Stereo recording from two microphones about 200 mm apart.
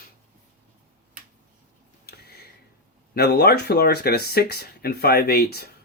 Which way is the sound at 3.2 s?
55° left (ahead or behind).